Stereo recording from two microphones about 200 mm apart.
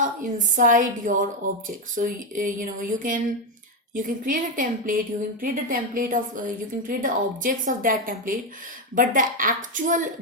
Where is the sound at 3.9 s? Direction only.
40° right (ahead or behind).